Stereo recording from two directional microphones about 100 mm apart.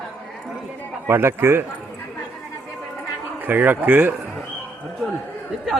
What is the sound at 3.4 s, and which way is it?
Speech, 20° right (ahead or behind).